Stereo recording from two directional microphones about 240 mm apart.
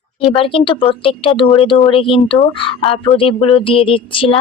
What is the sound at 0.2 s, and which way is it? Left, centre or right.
Speech, left.